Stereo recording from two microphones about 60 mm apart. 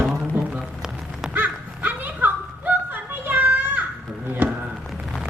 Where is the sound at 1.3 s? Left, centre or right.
Right.